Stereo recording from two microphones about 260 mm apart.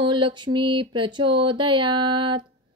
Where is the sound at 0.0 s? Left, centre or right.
Centre.